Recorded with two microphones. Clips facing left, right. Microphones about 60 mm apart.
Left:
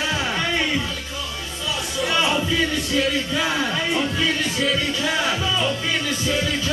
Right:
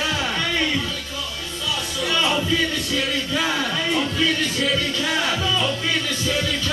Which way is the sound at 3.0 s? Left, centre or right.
Centre.